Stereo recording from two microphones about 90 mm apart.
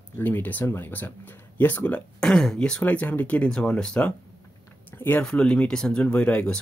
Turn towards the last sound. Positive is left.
turn(degrees=15)  # may be behind; listen again after turning